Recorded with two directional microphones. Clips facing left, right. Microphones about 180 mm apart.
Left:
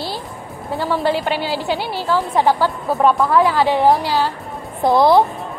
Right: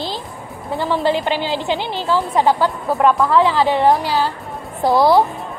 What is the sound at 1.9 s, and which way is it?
Speech, 20° right (ahead or behind).